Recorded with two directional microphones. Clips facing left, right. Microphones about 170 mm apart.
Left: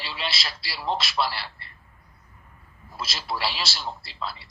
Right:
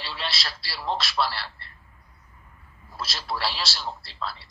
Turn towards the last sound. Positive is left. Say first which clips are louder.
# even
turn(degrees=15)  # may be behind; listen again after turning